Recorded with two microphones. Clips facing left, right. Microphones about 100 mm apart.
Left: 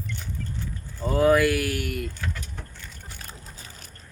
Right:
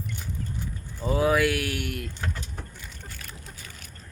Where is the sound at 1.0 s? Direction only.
Centre (ahead or behind).